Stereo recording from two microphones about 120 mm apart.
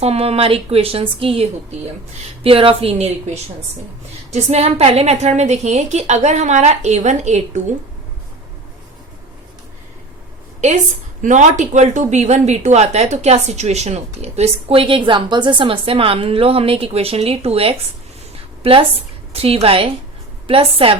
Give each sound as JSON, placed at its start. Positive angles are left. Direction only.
{"t": 0.0, "sound": "a woman's voice", "side_deg": -60}
{"t": 11.2, "sound": "a woman's voice", "side_deg": -90}